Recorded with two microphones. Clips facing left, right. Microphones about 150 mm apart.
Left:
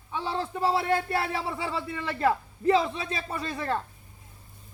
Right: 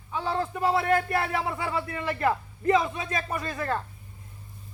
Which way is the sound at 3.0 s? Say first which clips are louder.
Right 2 dB; 30° left (ahead or behind).